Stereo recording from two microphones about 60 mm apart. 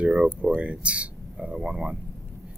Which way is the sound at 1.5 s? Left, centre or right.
Centre.